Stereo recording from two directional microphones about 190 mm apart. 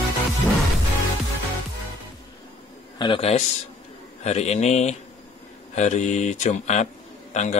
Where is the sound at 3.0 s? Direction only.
30° left (ahead or behind).